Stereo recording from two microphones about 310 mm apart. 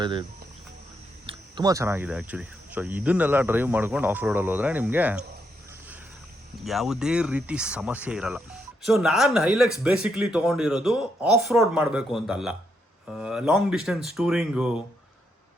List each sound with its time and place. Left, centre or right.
0.0 s speech: centre
1.3 s speech: centre
6.6 s speech: centre